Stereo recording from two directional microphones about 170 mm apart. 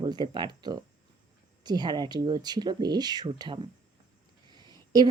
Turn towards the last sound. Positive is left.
turn(degrees=-25)  # may be behind; listen again after turning